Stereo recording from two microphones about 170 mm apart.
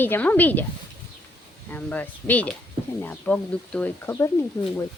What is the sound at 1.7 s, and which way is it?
Speech, 10° left (ahead or behind).